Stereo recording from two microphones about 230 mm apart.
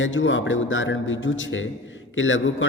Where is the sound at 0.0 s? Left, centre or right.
Left.